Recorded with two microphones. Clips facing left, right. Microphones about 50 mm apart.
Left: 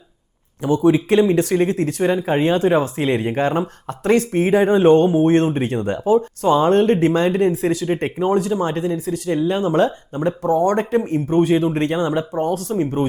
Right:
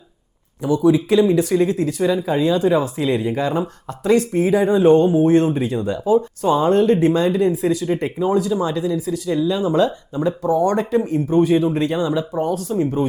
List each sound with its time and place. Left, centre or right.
0.6 s speech: left